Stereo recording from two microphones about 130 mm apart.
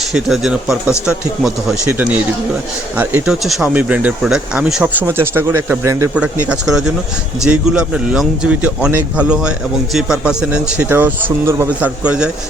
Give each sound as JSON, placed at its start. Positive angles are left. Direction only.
{"t": 0.1, "sound": "speech", "side_deg": -5}
{"t": 12.0, "sound": "speech", "side_deg": -5}